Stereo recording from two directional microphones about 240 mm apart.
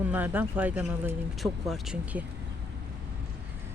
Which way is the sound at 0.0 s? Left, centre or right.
Centre.